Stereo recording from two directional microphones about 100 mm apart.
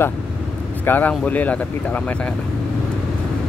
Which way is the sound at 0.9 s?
15° left (ahead or behind).